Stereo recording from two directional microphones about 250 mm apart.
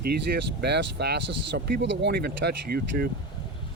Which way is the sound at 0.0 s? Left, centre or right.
Right.